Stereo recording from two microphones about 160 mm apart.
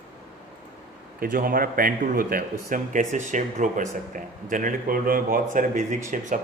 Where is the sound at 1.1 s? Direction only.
65° right (ahead or behind).